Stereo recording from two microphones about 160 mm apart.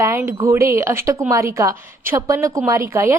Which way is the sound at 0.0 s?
15° right (ahead or behind).